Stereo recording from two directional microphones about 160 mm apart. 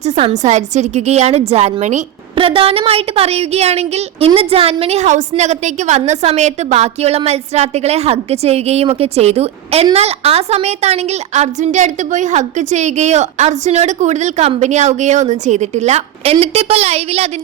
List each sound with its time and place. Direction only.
0.0 s a woman's voice: 45° right (ahead or behind)
2.3 s a woman's voice: 35° right (ahead or behind)